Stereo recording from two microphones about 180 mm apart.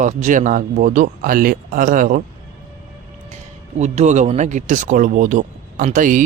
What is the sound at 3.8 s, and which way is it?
Speech, 40° right (ahead or behind).